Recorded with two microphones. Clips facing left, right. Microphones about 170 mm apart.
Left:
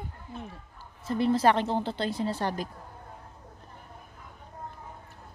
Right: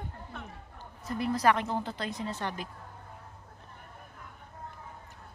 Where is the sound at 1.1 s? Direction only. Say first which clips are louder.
Left 4 dB; 30° left (ahead or behind).